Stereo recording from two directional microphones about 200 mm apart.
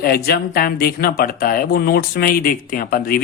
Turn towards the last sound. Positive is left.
turn(degrees=45)  # may be behind; listen again after turning